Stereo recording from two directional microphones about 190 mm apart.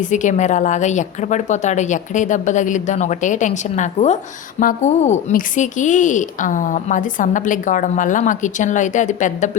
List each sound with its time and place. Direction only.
0.0 s a woman's voice: 40° left (ahead or behind)